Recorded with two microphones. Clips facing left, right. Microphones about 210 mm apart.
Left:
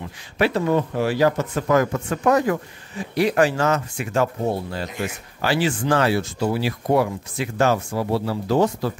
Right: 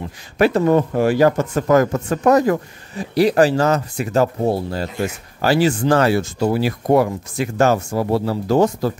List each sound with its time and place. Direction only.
0.4 s speech: 45° right (ahead or behind)